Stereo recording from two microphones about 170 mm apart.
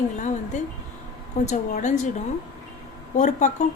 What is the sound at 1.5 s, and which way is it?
A woman's voice, 45° left (ahead or behind).